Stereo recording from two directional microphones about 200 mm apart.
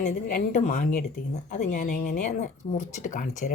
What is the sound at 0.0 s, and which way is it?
Speech, 40° left (ahead or behind).